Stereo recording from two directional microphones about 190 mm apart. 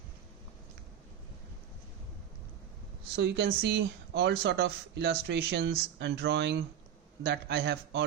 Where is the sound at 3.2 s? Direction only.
60° right (ahead or behind).